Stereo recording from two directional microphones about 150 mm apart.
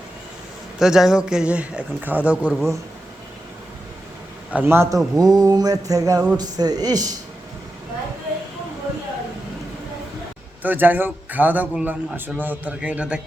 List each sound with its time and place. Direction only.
0.8 s a man's voice: 5° right (ahead or behind)
2.5 s speech: centre (ahead or behind)
4.5 s a man's voice: 15° right (ahead or behind)
5.1 s mantra: 25° right (ahead or behind)
10.6 s a man's voice: 10° right (ahead or behind)